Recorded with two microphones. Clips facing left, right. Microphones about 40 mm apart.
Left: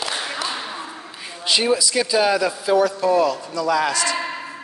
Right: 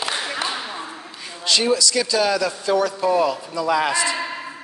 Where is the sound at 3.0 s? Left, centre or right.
Centre.